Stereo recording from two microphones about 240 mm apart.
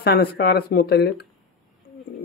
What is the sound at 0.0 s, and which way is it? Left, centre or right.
Speech, left.